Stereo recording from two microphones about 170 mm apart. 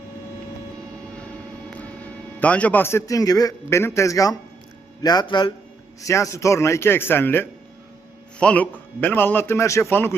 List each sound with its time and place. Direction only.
2.4 s a man's voice: 10° left (ahead or behind)